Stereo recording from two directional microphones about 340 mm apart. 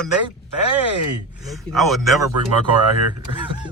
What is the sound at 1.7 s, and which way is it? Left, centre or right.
Speech, centre.